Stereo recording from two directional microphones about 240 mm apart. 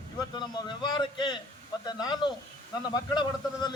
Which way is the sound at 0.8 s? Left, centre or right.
Centre.